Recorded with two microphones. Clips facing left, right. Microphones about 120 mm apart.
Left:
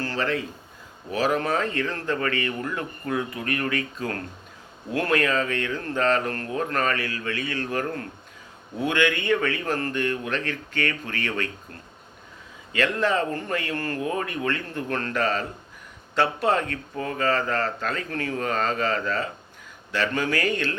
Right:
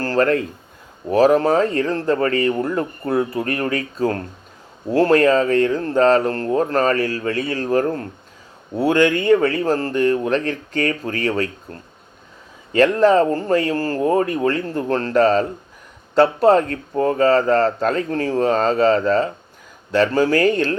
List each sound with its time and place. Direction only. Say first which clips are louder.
0.0 s speech: right 9 dB; 45° right (ahead or behind)